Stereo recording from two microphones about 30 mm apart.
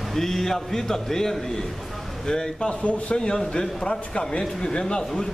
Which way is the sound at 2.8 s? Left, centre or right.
Left.